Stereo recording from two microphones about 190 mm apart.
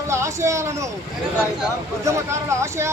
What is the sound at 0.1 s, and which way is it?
Speech, 15° right (ahead or behind).